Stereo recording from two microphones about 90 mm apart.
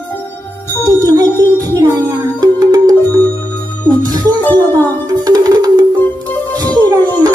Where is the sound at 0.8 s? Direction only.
45° right (ahead or behind).